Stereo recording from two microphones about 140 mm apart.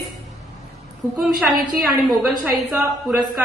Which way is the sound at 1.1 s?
Centre (ahead or behind).